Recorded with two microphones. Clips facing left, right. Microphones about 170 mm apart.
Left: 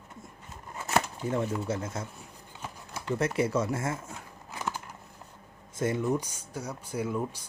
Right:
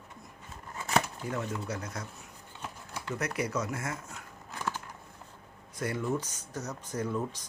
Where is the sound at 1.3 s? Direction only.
25° left (ahead or behind).